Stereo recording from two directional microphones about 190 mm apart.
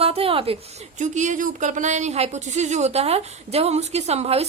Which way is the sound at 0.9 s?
40° right (ahead or behind).